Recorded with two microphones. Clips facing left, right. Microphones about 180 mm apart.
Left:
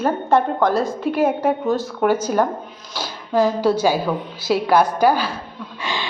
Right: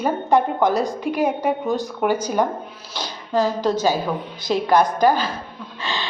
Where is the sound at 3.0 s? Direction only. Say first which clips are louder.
Left 2 dB; 10° left (ahead or behind).